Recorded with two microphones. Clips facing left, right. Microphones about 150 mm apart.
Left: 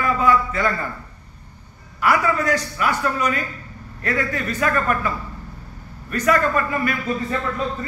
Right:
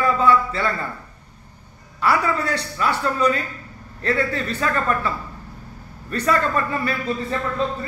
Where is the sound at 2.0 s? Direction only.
30° right (ahead or behind).